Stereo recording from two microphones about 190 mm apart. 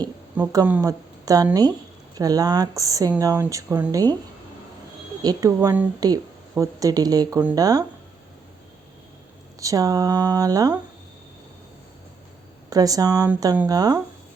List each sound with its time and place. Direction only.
0.3 s a woman's voice: 10° right (ahead or behind)
5.2 s a woman's voice: 20° right (ahead or behind)
9.6 s speech: 20° right (ahead or behind)
12.7 s speech: 20° right (ahead or behind)